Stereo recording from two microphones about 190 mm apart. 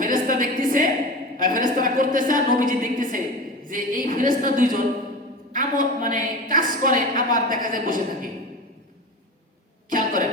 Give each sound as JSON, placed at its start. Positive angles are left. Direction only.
{"t": 0.0, "sound": "a sound", "side_deg": -45}
{"t": 1.4, "sound": "a woman's voice", "side_deg": -45}
{"t": 9.9, "sound": "speech", "side_deg": -45}